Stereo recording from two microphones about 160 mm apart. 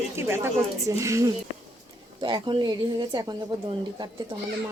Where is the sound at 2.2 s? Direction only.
30° right (ahead or behind).